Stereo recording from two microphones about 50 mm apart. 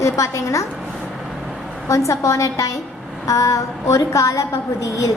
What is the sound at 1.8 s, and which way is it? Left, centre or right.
A woman's voice, left.